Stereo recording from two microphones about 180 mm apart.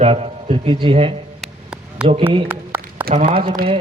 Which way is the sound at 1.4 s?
5° right (ahead or behind).